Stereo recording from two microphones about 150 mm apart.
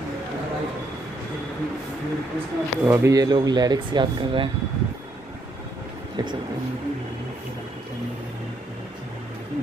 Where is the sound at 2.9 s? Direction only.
25° right (ahead or behind).